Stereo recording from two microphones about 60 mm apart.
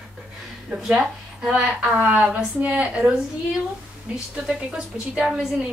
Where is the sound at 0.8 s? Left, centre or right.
Centre.